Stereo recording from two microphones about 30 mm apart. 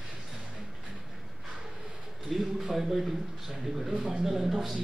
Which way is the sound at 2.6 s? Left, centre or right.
Centre.